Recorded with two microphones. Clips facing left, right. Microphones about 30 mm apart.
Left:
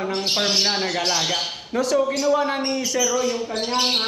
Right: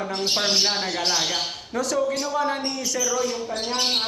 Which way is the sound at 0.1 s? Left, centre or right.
Centre.